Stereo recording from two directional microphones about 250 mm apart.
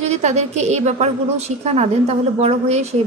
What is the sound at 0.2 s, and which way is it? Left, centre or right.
Speech, right.